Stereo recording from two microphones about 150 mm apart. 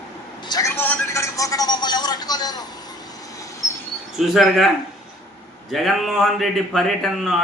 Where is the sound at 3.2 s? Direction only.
20° left (ahead or behind).